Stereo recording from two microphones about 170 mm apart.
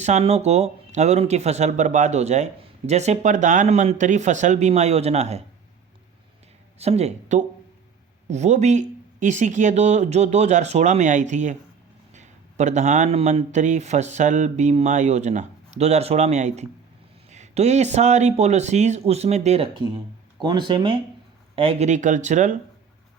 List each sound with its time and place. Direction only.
0.0 s speech: 40° right (ahead or behind)
6.7 s speech: 40° right (ahead or behind)
20.4 s speech: 25° right (ahead or behind); by 22.5 s 45° right (ahead or behind)